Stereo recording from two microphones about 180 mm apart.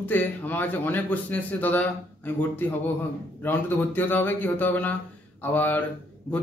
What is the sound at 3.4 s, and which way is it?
A man's voice, 10° left (ahead or behind).